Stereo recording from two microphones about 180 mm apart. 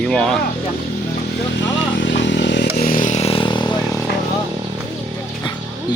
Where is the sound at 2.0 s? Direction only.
80° left.